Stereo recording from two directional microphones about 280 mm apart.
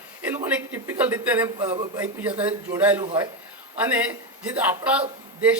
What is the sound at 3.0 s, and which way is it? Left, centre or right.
Speech, centre.